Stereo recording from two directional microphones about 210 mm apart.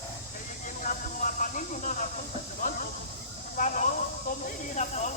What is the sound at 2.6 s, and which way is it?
Hiss, 40° left (ahead or behind).